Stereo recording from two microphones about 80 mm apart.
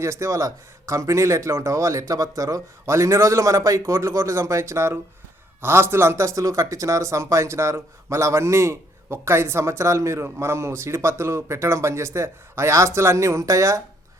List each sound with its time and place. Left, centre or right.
0.0 s speech: right